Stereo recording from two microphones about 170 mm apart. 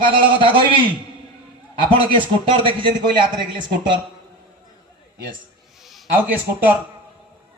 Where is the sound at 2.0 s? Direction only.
30° right (ahead or behind).